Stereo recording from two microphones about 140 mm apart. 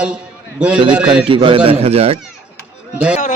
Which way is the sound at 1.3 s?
35° right (ahead or behind).